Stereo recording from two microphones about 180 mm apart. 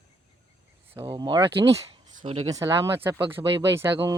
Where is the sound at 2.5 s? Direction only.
20° right (ahead or behind).